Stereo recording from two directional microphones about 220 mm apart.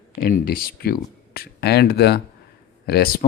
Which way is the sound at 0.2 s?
45° left (ahead or behind).